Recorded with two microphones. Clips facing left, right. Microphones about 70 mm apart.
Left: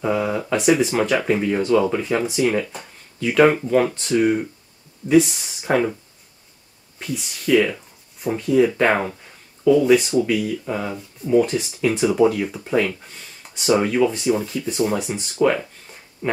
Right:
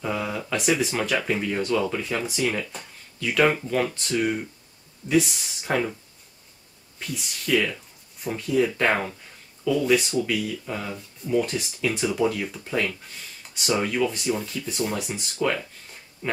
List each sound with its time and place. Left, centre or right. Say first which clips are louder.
0.0 s speech: left 7 dB; centre
0.6 s speech: left 6 dB; centre
2.2 s speech: left 6 dB; centre
7.0 s speech: left 5 dB; centre
10.7 s speech: left 6 dB; centre
11.3 s speech: left 7 dB; centre
15.4 s speech: left 7 dB; centre